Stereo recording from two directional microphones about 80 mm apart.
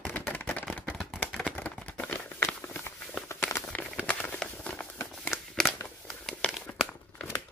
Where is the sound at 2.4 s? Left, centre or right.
Left.